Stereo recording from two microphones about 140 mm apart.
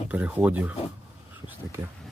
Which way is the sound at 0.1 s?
10° right (ahead or behind).